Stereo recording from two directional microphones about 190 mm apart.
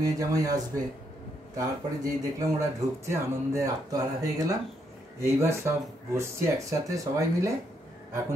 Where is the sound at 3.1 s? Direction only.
15° right (ahead or behind).